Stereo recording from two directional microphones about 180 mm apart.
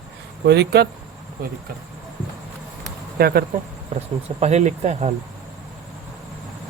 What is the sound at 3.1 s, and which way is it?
Speech, 60° right (ahead or behind).